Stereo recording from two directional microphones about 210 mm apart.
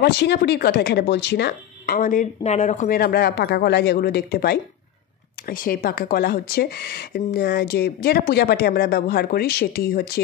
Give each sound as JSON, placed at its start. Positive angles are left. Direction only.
{"t": 0.0, "sound": "a woman's voice", "side_deg": 50}